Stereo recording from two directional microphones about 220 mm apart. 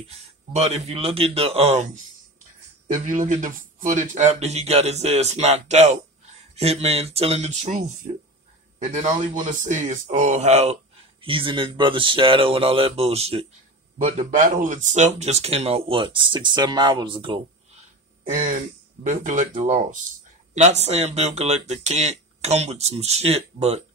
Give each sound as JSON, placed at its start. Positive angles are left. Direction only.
{"t": 0.1, "sound": "speech", "side_deg": -30}
{"t": 2.9, "sound": "speech", "side_deg": -35}
{"t": 19.0, "sound": "speech", "side_deg": -35}